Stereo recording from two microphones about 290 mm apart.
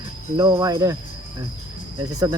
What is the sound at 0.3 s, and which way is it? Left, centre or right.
Speech, centre.